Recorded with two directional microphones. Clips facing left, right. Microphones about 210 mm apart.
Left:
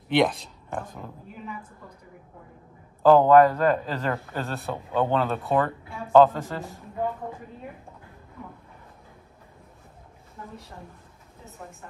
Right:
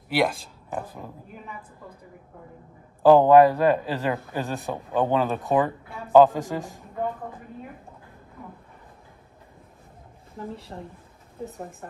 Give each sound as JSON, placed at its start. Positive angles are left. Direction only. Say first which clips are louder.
{"t": 0.1, "sound": "speech", "louder": "left 2 dB", "side_deg": -5}
{"t": 3.0, "sound": "a man's voice", "louder": "right 1 dB", "side_deg": -15}
{"t": 10.3, "sound": "speech", "louder": "right 6 dB", "side_deg": -30}